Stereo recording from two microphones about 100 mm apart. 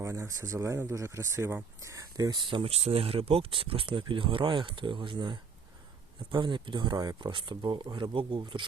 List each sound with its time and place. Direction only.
0.0 s speech: 30° right (ahead or behind)
2.4 s speech: 55° right (ahead or behind)
2.6 s speech: 90° right; by 7.2 s 40° right (ahead or behind)
7.2 s speech: 55° right (ahead or behind)